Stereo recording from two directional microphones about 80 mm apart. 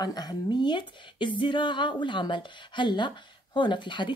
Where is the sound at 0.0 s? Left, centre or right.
Left.